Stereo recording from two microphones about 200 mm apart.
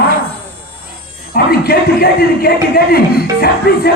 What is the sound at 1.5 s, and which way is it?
A man's voice, 50° left (ahead or behind).